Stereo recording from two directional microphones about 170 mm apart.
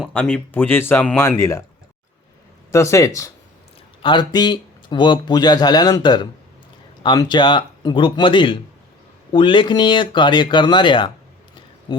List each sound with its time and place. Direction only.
0.1 s speech: 10° left (ahead or behind)
2.7 s speech: 15° left (ahead or behind)